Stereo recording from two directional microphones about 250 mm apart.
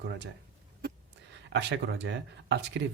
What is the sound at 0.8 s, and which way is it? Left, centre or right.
Speech, right.